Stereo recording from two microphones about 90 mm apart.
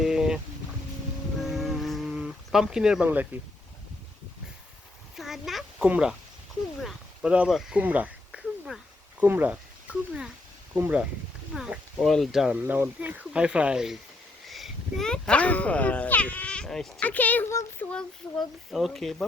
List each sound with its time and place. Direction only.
0.0 s a sound: 5° right (ahead or behind)
1.4 s a sound: centre (ahead or behind)
3.3 s speech: 20° right (ahead or behind)
5.1 s speech: centre (ahead or behind)
6.8 s a sound: 10° right (ahead or behind)
9.2 s speech: 20° right (ahead or behind)
11.5 s speech: 5° right (ahead or behind)
12.5 s speech: 15° right (ahead or behind); by 16.9 s 5° left (ahead or behind)
17.0 s a child's voice: 15° left (ahead or behind)
17.9 s speech: centre (ahead or behind)